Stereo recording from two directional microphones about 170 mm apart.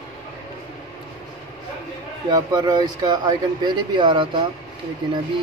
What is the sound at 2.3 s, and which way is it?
Speech, 25° right (ahead or behind).